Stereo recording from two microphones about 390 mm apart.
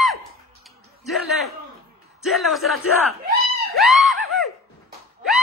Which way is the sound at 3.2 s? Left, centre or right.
Right.